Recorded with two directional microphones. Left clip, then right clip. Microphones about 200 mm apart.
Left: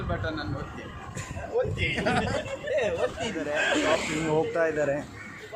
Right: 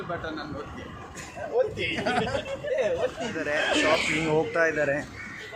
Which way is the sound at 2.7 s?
20° left (ahead or behind).